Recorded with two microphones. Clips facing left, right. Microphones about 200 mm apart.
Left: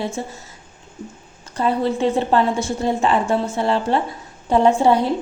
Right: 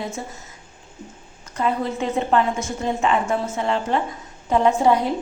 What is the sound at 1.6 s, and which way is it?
A woman's voice, 30° left (ahead or behind).